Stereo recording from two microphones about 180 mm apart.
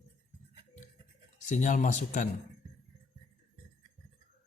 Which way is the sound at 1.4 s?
45° left (ahead or behind).